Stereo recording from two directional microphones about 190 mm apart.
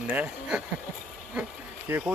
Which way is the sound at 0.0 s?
5° right (ahead or behind).